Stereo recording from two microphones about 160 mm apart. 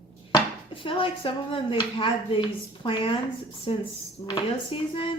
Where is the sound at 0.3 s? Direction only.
35° left (ahead or behind).